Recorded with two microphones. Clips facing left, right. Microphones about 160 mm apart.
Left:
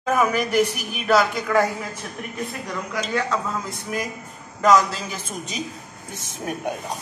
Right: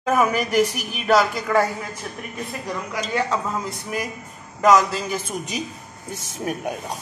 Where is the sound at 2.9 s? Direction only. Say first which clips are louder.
Even; 20° right (ahead or behind).